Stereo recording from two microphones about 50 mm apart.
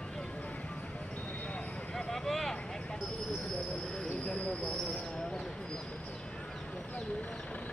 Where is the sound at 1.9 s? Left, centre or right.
Centre.